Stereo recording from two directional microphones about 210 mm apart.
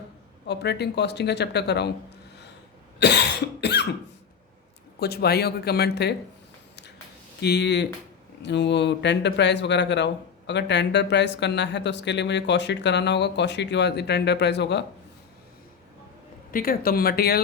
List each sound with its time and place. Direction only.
0.4 s speech: 55° left (ahead or behind)
3.0 s cough: 55° left (ahead or behind)
4.9 s speech: 50° left (ahead or behind)
7.4 s speech: 55° left (ahead or behind)
16.5 s speech: 45° left (ahead or behind)